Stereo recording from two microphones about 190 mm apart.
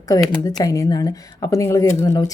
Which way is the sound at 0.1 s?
20° left (ahead or behind).